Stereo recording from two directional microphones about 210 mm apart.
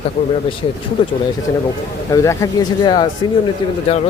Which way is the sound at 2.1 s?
15° left (ahead or behind).